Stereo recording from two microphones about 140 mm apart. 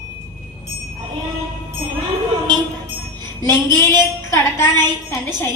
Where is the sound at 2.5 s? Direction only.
30° right (ahead or behind).